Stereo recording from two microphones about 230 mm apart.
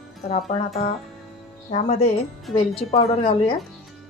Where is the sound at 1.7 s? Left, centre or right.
Left.